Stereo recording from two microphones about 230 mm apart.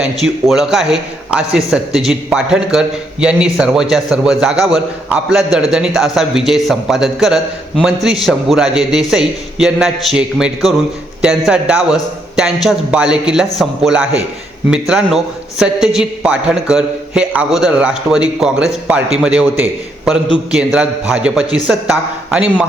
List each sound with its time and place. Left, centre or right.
0.0 s a man's voice: centre